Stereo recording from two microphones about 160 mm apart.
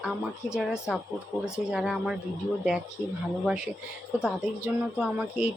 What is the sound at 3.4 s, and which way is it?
Speech, 5° right (ahead or behind).